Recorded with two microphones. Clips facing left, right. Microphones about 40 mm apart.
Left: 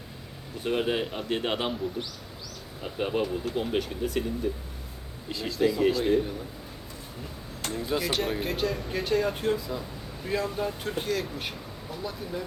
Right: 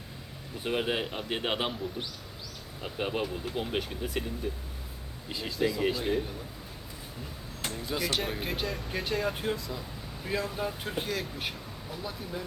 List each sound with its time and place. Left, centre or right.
0.6 s speech: centre
2.8 s speech: centre
5.3 s speech: centre
5.5 s speech: centre
7.7 s speech: centre
9.6 s speech: centre
10.2 s speech: centre